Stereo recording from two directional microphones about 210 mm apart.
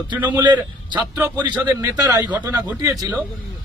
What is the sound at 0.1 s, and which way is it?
A man's voice, 20° right (ahead or behind).